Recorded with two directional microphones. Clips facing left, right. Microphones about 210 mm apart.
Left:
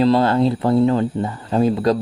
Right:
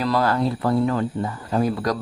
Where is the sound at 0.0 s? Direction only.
25° left (ahead or behind).